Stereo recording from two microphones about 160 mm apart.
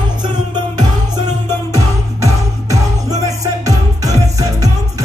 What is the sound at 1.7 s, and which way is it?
Music, 20° right (ahead or behind).